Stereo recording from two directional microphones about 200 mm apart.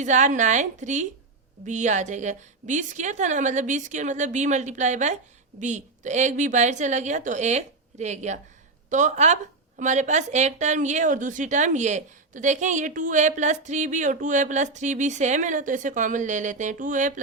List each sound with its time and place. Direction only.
0.0 s a woman's voice: 35° right (ahead or behind)